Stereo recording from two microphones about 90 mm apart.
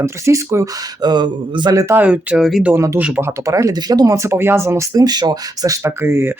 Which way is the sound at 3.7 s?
45° right (ahead or behind).